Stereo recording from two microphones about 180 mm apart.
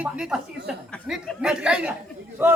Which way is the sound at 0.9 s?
Centre (ahead or behind).